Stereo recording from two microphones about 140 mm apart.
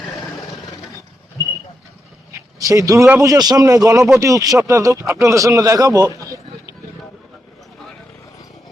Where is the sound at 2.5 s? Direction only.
25° right (ahead or behind).